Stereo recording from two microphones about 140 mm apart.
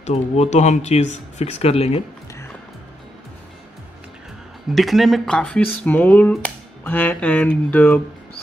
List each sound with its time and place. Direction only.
0.0 s speech: 50° left (ahead or behind)
4.7 s speech: centre (ahead or behind)